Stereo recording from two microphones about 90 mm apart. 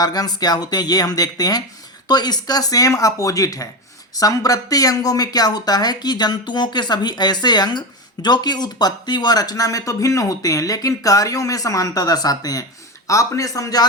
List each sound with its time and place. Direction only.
0.0 s speech: 50° left (ahead or behind)